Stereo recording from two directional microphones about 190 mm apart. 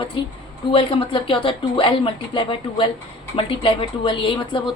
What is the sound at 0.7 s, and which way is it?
A woman's voice, 30° left (ahead or behind).